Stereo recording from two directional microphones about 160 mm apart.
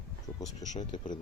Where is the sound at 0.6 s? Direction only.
25° left (ahead or behind).